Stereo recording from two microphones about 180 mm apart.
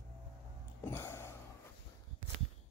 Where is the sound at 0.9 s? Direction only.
15° left (ahead or behind).